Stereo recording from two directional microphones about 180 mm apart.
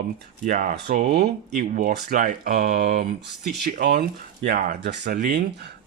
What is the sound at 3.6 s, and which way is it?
Speech, 55° right (ahead or behind).